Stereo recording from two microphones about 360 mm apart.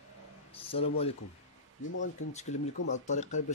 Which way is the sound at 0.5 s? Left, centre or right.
Centre.